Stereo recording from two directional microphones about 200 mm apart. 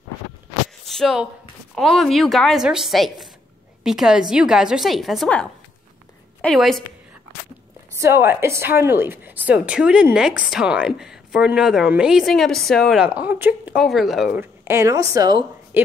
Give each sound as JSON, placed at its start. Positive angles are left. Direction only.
{"t": 0.8, "sound": "a sound", "side_deg": 0}
{"t": 1.8, "sound": "speech", "side_deg": 0}
{"t": 7.9, "sound": "a woman's voice", "side_deg": -10}